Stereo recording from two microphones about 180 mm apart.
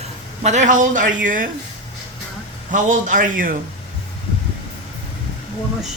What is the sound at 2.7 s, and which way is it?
Speech, 45° right (ahead or behind).